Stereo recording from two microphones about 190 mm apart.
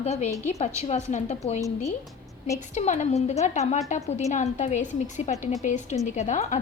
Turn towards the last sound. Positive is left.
turn(degrees=40)  # may be behind; listen again after turning